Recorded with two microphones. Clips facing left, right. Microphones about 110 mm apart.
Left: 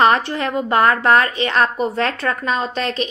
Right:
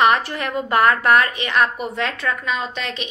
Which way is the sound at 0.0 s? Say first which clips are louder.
Left 2 dB; 30° left (ahead or behind).